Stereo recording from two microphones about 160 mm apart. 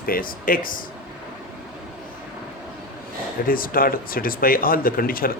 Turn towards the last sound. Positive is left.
turn(degrees=65)  # may be behind; listen again after turning